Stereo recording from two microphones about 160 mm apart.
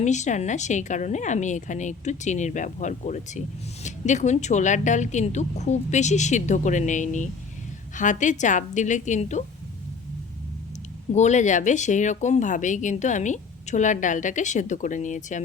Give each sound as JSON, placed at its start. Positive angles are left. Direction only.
{"t": 0.0, "sound": "speech", "side_deg": 45}
{"t": 11.1, "sound": "speech", "side_deg": 45}